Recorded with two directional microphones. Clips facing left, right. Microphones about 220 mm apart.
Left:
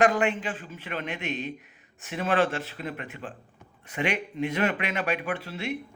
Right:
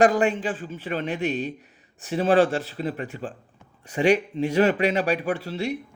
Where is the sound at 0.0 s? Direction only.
35° right (ahead or behind).